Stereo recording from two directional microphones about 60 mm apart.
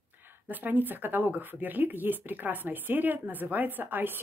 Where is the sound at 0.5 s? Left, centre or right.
Right.